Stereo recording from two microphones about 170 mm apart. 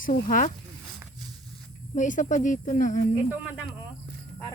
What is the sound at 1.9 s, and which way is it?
Speech, 50° left (ahead or behind).